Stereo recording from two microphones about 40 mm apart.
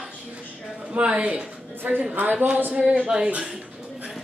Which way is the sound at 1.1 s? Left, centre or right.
Right.